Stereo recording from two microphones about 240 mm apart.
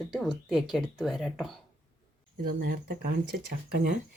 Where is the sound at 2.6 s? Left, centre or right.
Right.